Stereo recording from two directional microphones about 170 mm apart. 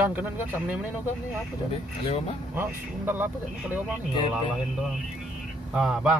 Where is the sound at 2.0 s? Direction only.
35° left (ahead or behind).